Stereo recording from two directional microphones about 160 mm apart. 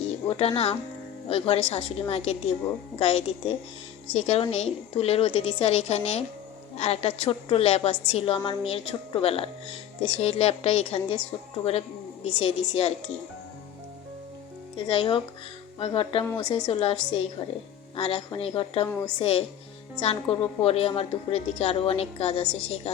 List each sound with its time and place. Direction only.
0.0 s a woman's voice: 40° left (ahead or behind)
12.2 s a woman's voice: 40° left (ahead or behind)
14.8 s a woman's voice: 35° left (ahead or behind)